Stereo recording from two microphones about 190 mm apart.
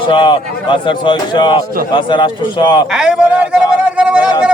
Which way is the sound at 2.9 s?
5° right (ahead or behind).